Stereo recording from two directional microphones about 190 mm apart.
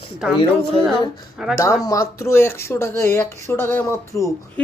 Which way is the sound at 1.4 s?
5° right (ahead or behind).